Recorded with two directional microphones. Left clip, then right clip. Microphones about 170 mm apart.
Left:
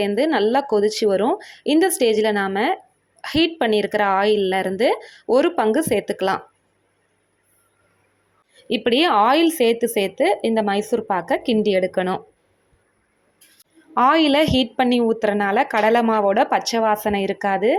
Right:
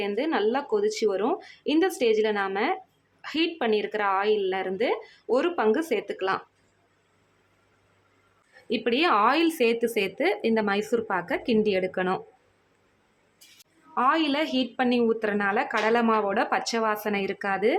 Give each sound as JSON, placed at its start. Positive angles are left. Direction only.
{"t": 0.0, "sound": "a woman's voice", "side_deg": 30}
{"t": 8.7, "sound": "a woman's voice", "side_deg": 25}
{"t": 13.9, "sound": "a woman's voice", "side_deg": 30}